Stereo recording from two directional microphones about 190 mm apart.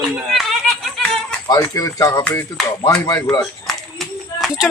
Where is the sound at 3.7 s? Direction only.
Centre (ahead or behind).